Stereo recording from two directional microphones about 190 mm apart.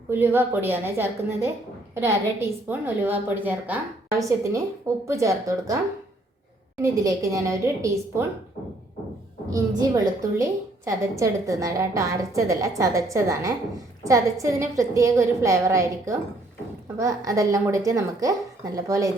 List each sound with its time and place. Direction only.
0.1 s a woman's voice: 10° right (ahead or behind)
6.8 s a woman's voice: 20° right (ahead or behind)
9.5 s a woman's voice: 15° right (ahead or behind)